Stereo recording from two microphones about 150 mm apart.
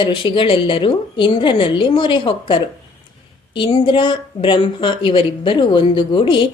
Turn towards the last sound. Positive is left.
turn(degrees=35)  # may be behind; listen again after turning